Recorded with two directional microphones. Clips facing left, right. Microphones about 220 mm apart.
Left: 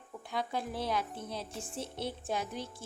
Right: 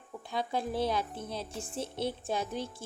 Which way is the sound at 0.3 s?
25° right (ahead or behind).